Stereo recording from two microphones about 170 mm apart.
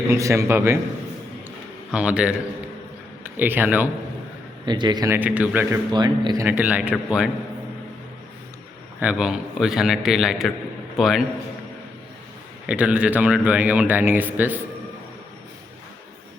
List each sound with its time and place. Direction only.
0.1 s a man's voice: 15° right (ahead or behind)
1.9 s a man's voice: 5° right (ahead or behind)
4.6 s a man's voice: 25° right (ahead or behind); by 5.8 s 10° right (ahead or behind)
5.9 s speech: 25° right (ahead or behind)
6.4 s a man's voice: 10° right (ahead or behind)
9.0 s a man's voice: 5° right (ahead or behind)
12.6 s a man's voice: 5° right (ahead or behind)